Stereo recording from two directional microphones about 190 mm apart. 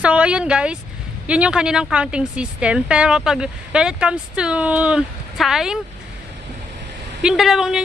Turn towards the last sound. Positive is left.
turn(degrees=-5)  # may be behind; listen again after turning